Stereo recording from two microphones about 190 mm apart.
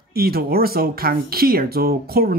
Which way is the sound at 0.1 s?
55° right (ahead or behind).